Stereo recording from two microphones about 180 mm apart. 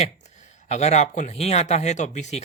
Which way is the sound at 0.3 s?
40° left (ahead or behind).